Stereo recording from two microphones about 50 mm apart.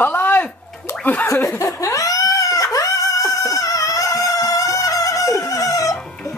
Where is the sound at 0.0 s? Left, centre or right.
Left.